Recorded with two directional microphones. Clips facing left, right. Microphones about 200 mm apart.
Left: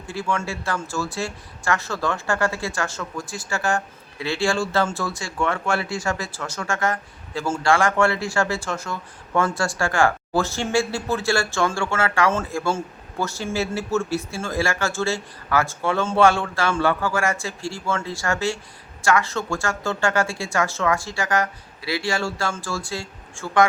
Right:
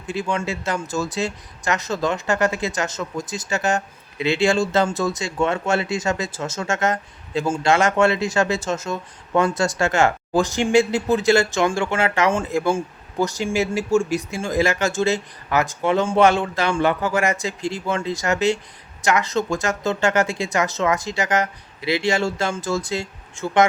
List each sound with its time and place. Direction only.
0.1 s speech: 20° right (ahead or behind)